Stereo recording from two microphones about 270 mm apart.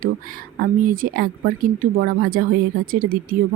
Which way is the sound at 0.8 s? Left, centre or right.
Right.